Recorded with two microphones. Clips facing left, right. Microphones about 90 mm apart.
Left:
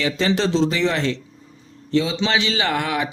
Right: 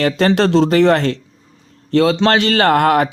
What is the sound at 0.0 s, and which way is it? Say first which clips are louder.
Speech: right 6 dB; 55° right (ahead or behind).